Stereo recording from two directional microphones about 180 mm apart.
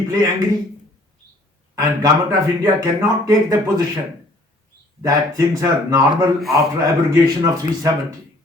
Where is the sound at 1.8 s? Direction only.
20° right (ahead or behind).